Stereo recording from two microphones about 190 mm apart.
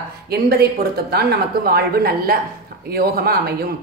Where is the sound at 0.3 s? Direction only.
55° right (ahead or behind).